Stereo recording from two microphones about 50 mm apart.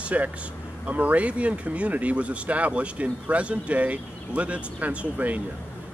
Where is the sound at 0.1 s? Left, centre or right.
Right.